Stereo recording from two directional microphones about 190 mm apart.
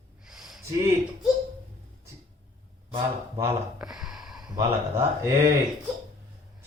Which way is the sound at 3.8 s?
Centre (ahead or behind).